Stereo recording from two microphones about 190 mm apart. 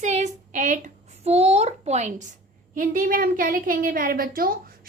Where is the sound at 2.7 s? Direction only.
45° right (ahead or behind).